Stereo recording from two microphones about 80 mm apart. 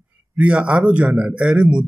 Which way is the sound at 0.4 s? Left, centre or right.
Centre.